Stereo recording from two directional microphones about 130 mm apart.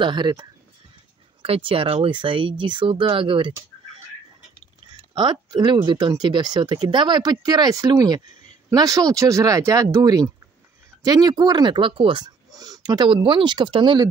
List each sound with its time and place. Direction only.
0.0 s speech: 35° right (ahead or behind)
5.1 s speech: 35° right (ahead or behind)